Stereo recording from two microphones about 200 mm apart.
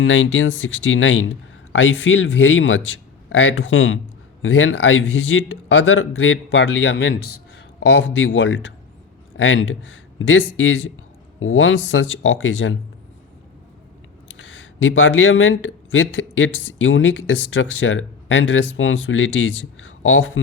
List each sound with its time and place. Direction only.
0.0 s speech: 75° left (ahead or behind)
14.3 s speech: 80° left